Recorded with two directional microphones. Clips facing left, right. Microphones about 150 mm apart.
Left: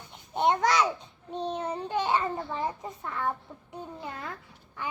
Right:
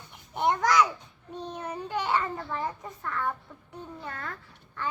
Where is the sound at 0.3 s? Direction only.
20° left (ahead or behind).